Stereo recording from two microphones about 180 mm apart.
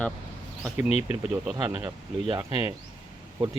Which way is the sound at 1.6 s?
25° right (ahead or behind).